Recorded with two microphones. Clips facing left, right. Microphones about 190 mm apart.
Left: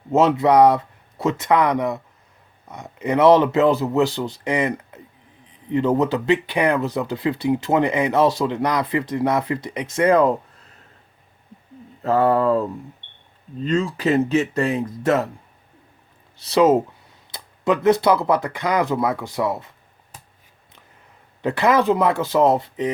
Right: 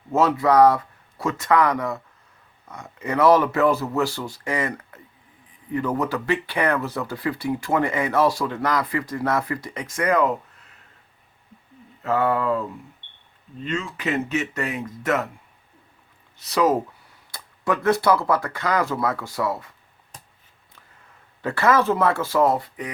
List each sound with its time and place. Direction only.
0.1 s speech: 20° left (ahead or behind)
12.0 s speech: 35° left (ahead or behind)
16.4 s speech: 25° left (ahead or behind)
21.4 s speech: 15° left (ahead or behind)